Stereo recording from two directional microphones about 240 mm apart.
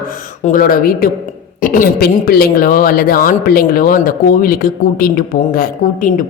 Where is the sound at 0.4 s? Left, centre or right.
Left.